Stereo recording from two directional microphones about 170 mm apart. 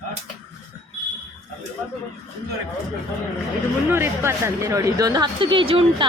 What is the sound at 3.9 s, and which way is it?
A woman's voice, 15° right (ahead or behind).